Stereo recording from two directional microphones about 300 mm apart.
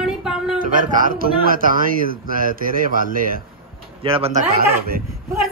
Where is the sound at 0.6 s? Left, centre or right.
Right.